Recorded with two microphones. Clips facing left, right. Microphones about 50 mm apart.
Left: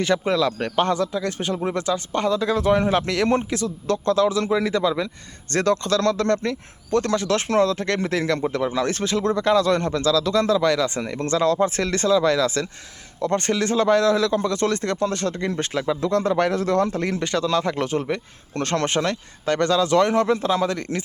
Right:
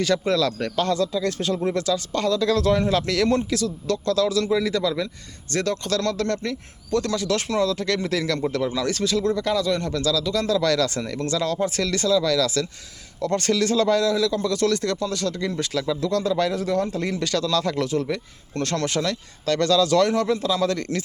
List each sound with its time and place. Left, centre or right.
0.0 s speech: left
5.5 s speech: left
9.9 s speech: left
16.3 s speech: left
17.8 s speech: left
20.6 s speech: left